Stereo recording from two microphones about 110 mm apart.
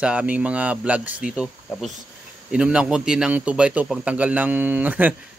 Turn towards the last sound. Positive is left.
turn(degrees=-15)  # may be behind; listen again after turning